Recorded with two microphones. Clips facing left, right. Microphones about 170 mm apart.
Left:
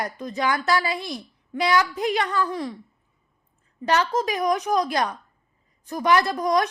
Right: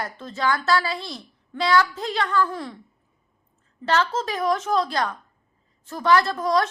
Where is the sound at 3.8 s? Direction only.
15° left (ahead or behind).